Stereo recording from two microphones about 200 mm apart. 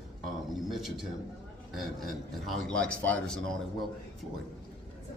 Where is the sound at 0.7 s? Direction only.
Centre (ahead or behind).